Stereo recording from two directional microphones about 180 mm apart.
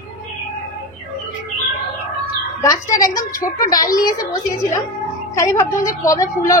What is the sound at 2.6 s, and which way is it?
A woman's voice, 20° left (ahead or behind).